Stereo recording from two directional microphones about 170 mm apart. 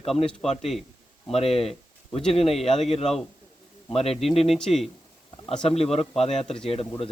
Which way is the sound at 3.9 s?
35° left (ahead or behind).